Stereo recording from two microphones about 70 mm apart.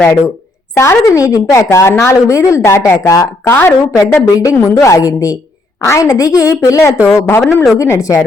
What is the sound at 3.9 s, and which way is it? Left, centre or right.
Speech, left.